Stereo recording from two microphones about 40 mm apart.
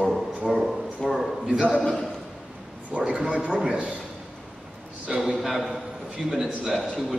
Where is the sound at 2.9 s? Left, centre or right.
Right.